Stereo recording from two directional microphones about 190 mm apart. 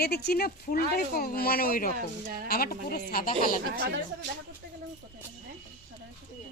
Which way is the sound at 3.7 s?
55° right (ahead or behind).